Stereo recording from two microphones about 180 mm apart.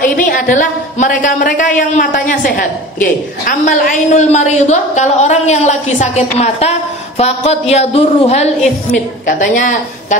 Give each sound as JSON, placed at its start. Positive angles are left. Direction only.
{"t": 0.0, "sound": "a woman's voice", "side_deg": 45}
{"t": 9.3, "sound": "a woman's voice", "side_deg": 45}